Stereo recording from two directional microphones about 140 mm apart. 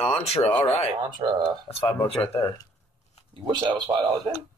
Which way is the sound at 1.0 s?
35° right (ahead or behind).